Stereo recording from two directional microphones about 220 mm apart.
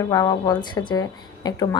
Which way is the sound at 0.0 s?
15° left (ahead or behind).